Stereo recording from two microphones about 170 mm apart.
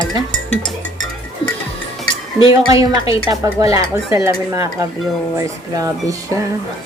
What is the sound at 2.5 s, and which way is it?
Speech, 20° right (ahead or behind).